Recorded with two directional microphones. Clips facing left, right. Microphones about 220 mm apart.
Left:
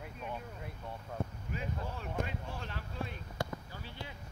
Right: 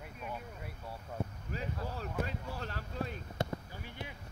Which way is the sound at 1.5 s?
40° right (ahead or behind).